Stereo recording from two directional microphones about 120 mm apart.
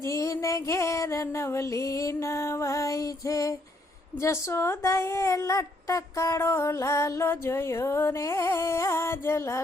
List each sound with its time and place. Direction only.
0.0 s music: 25° left (ahead or behind)
4.2 s speech: 25° left (ahead or behind)